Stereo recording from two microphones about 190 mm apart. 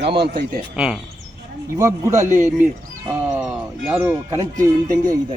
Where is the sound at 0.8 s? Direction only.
5° right (ahead or behind).